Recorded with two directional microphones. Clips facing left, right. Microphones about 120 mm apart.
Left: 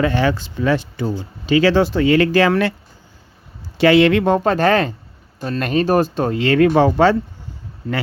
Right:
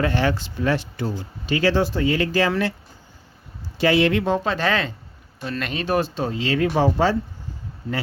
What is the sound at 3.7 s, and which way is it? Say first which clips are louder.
Speech: left 6 dB; 80° left.